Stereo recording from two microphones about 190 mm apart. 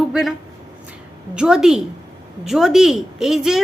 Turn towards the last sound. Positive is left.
turn(degrees=0)  # may be behind; listen again after turning